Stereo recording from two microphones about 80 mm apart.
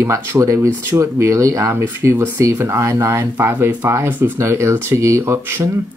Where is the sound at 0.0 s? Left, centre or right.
Right.